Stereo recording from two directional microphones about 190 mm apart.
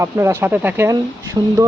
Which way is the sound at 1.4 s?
25° right (ahead or behind).